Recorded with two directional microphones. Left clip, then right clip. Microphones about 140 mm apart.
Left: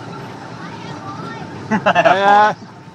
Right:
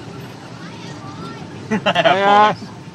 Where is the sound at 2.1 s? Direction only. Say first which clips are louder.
Right 1 dB; 15° right (ahead or behind).